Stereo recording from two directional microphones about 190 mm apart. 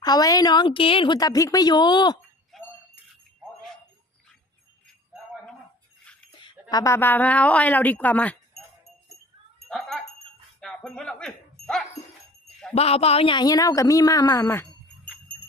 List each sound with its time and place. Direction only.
0.0 s speech: 20° left (ahead or behind)
2.5 s a sound: centre (ahead or behind)
6.4 s a woman's voice: 20° left (ahead or behind)
9.6 s dog: centre (ahead or behind)
12.7 s speech: 30° left (ahead or behind); by 15.1 s 10° left (ahead or behind)